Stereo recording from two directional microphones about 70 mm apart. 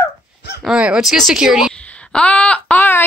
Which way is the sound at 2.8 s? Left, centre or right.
Left.